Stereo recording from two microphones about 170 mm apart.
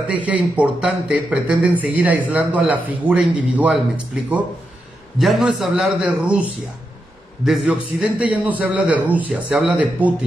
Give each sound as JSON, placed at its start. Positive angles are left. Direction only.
{"t": 0.1, "sound": "a man's voice", "side_deg": -10}